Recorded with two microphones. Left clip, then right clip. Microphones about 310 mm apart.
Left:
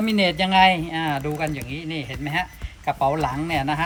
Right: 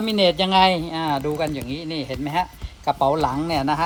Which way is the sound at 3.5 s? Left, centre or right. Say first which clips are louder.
Right 2 dB; right.